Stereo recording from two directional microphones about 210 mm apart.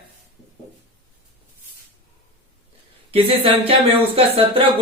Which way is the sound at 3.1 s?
25° right (ahead or behind).